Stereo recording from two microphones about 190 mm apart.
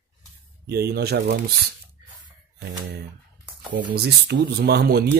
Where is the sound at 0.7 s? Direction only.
60° right (ahead or behind).